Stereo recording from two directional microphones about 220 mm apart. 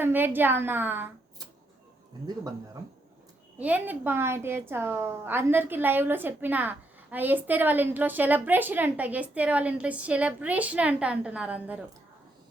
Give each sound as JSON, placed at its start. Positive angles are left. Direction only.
{"t": 0.0, "sound": "a woman's voice", "side_deg": -10}
{"t": 3.6, "sound": "a woman's voice", "side_deg": -5}